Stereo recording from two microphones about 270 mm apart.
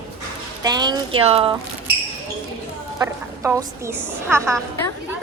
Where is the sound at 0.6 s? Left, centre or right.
Centre.